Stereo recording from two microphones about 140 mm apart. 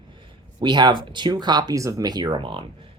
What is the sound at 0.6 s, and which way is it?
Speech, 35° right (ahead or behind).